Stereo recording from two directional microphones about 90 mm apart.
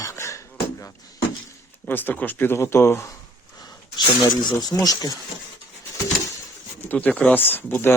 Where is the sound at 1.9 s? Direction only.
20° left (ahead or behind).